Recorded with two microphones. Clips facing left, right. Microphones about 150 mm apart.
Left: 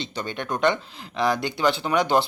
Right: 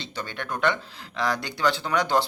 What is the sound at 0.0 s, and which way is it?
Speech, 15° left (ahead or behind).